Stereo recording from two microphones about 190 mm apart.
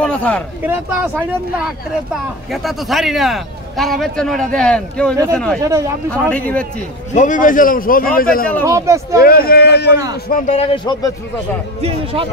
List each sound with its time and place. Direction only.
0.0 s a sound: 5° left (ahead or behind)
2.5 s speech: centre (ahead or behind)
5.6 s speech: 15° right (ahead or behind)
6.1 s speech: 5° left (ahead or behind)
7.2 s a man's voice: 45° left (ahead or behind)
8.6 s speech: 15° right (ahead or behind)
9.2 s speech: 50° left (ahead or behind)
10.2 s speech: 45° left (ahead or behind); by 11.1 s 20° left (ahead or behind)
11.8 s speech: 30° right (ahead or behind)